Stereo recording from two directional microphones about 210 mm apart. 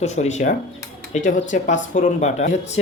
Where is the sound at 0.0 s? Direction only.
30° left (ahead or behind).